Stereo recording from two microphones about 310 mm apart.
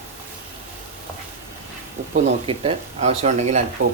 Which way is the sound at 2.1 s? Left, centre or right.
Centre.